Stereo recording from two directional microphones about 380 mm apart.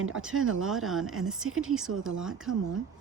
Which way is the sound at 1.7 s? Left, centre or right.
Centre.